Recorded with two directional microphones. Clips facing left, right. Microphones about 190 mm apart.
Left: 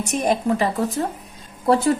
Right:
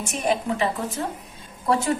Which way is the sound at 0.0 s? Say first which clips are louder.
Left 4 dB; 40° left (ahead or behind).